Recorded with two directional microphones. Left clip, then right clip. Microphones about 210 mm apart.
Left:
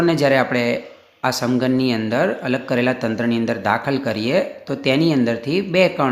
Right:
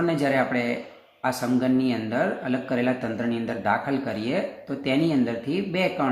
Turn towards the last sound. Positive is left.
turn(degrees=40)  # may be behind; listen again after turning